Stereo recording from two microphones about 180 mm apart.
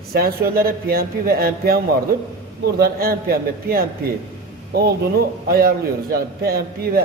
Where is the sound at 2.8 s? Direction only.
55° right (ahead or behind).